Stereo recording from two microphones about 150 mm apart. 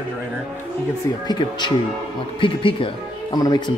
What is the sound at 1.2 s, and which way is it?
Speech, 30° left (ahead or behind).